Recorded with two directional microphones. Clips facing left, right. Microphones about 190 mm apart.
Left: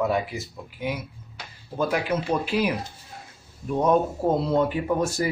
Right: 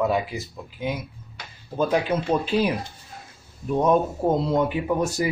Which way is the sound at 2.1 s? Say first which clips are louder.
Right 2 dB; 30° right (ahead or behind).